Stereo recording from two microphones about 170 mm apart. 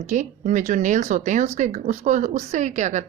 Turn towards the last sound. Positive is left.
turn(degrees=-45)  # may be behind; listen again after turning